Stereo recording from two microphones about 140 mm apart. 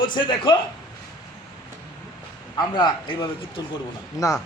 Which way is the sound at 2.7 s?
30° left (ahead or behind).